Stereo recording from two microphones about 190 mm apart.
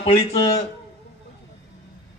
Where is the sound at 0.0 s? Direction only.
30° left (ahead or behind).